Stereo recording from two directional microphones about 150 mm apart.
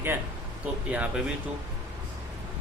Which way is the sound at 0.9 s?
10° right (ahead or behind).